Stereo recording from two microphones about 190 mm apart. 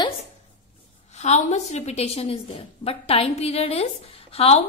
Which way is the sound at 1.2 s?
35° left (ahead or behind).